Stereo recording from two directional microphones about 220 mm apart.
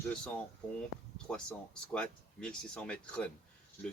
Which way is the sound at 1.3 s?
5° left (ahead or behind).